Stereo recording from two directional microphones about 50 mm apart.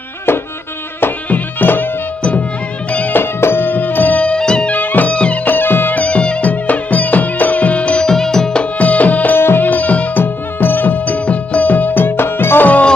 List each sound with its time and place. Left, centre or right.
0.3 s music: left
3.1 s music: left
4.2 s music: centre
4.7 s music: left
5.1 s music: left
5.5 s music: left
6.5 s music: left
8.0 s music: centre
8.8 s music: left
9.4 s music: left
9.6 s music: left
10.6 s music: left